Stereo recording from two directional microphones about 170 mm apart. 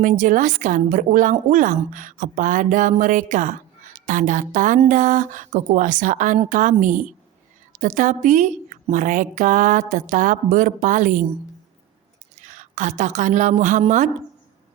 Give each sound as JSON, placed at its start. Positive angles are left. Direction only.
{"t": 0.0, "sound": "a woman's voice", "side_deg": -50}
{"t": 12.4, "sound": "a woman's voice", "side_deg": -45}